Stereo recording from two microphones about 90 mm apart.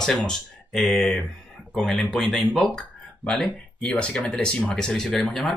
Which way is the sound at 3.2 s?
15° left (ahead or behind).